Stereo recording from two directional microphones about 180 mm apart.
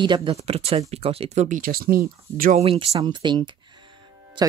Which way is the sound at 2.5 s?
30° right (ahead or behind).